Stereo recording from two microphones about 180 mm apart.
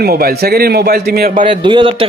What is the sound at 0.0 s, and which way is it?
A man's voice, 60° right (ahead or behind).